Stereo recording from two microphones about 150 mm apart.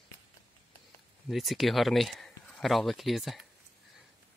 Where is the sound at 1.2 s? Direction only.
Centre (ahead or behind).